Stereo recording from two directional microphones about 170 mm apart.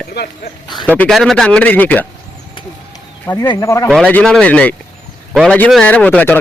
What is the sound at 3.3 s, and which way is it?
Speech, 25° left (ahead or behind).